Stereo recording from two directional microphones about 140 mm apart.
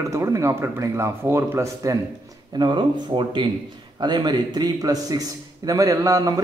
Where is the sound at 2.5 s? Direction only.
35° right (ahead or behind).